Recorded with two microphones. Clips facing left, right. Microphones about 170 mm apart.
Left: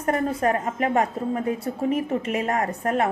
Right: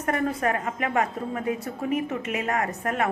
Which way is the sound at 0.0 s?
30° left (ahead or behind).